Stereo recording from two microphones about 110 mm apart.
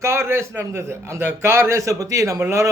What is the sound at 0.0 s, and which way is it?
A man's voice, 25° right (ahead or behind).